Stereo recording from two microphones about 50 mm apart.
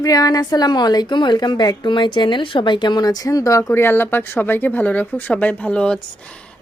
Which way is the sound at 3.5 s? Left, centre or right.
Left.